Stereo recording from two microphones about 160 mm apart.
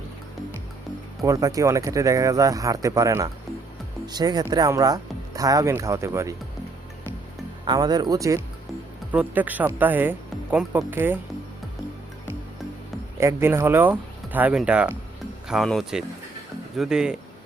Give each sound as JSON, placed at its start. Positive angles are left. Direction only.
{"t": 1.2, "sound": "speech", "side_deg": -20}
{"t": 7.6, "sound": "speech", "side_deg": -25}
{"t": 9.1, "sound": "speech", "side_deg": -10}
{"t": 13.1, "sound": "speech", "side_deg": -15}